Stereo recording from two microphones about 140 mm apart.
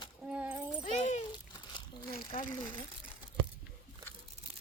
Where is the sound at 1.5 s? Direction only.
35° left (ahead or behind).